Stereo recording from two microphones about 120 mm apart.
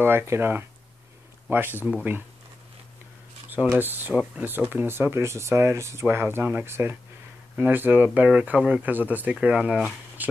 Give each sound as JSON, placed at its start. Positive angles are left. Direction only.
{"t": 0.0, "sound": "speech", "side_deg": -20}
{"t": 3.4, "sound": "speech", "side_deg": -15}